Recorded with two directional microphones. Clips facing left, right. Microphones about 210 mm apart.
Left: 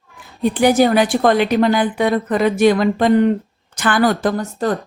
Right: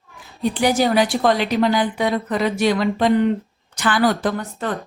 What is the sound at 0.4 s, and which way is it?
A woman's voice, 50° left (ahead or behind).